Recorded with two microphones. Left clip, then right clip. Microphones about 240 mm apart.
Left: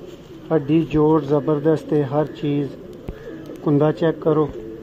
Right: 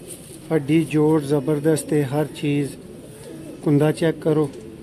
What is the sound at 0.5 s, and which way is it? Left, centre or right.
Speech, centre.